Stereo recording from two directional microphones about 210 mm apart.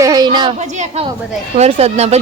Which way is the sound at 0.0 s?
20° right (ahead or behind).